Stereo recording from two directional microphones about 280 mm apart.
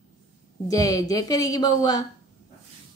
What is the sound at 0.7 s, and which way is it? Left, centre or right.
A woman's voice, centre.